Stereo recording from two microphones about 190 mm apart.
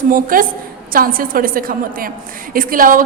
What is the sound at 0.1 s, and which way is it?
A woman's voice, 45° right (ahead or behind).